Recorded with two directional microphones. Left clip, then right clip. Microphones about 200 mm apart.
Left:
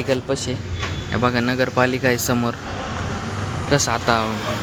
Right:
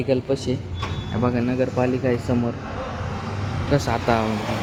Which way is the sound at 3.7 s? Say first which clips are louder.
Left 2 dB; 10° right (ahead or behind).